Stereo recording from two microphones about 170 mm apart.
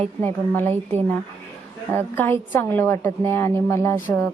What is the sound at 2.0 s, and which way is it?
A woman's voice, 10° left (ahead or behind).